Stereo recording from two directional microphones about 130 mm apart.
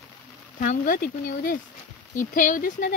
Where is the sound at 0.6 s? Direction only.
85° left.